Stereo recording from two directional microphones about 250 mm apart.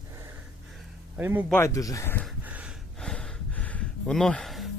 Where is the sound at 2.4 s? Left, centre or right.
Centre.